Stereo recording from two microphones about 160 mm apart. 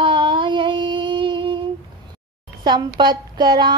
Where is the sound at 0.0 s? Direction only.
30° right (ahead or behind).